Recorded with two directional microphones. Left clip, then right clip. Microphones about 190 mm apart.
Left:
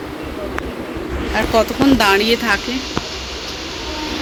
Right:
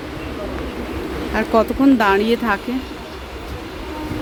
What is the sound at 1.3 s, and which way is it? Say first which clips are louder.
Speech: left 1 dB; 35° right (ahead or behind).